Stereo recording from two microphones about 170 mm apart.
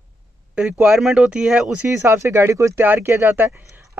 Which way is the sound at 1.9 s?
15° right (ahead or behind).